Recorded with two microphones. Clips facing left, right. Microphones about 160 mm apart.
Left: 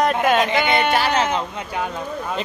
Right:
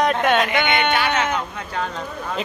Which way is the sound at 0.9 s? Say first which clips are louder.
Left 2 dB; 35° left (ahead or behind).